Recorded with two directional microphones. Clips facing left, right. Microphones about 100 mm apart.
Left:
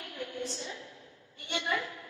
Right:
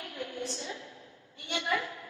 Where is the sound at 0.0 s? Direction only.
30° right (ahead or behind).